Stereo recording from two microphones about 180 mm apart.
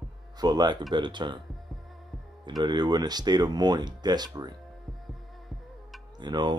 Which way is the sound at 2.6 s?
25° right (ahead or behind).